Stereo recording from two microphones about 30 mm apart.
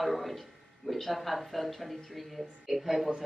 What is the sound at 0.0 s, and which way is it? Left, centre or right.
Speech, centre.